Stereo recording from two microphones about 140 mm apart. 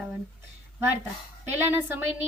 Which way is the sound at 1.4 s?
15° right (ahead or behind).